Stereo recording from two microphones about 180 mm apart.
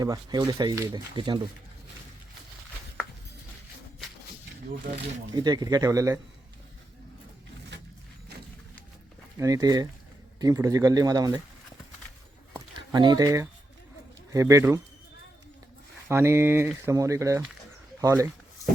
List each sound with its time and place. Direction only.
0.0 s speech: 20° right (ahead or behind)
5.3 s speech: 25° right (ahead or behind)
9.4 s speech: 20° right (ahead or behind)
12.9 s speech: 25° right (ahead or behind)
16.0 s speech: 15° right (ahead or behind)